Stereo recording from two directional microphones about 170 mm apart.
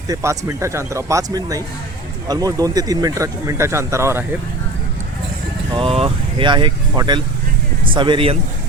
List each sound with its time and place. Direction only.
0.1 s speech: 15° right (ahead or behind)
5.7 s speech: 35° right (ahead or behind)